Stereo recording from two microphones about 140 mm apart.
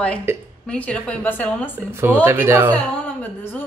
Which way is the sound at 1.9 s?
15° right (ahead or behind).